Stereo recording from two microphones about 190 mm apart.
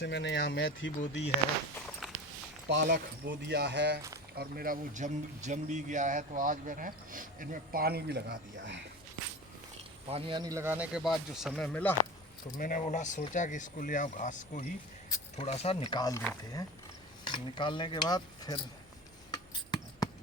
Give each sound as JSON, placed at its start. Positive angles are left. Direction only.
{"t": 0.0, "sound": "speech", "side_deg": 65}
{"t": 2.7, "sound": "speech", "side_deg": -50}
{"t": 3.2, "sound": "speech", "side_deg": -60}
{"t": 4.4, "sound": "speech", "side_deg": -50}
{"t": 10.1, "sound": "speech", "side_deg": -30}
{"t": 12.5, "sound": "speech", "side_deg": 45}
{"t": 15.4, "sound": "a sound", "side_deg": 35}
{"t": 17.2, "sound": "a sound", "side_deg": 25}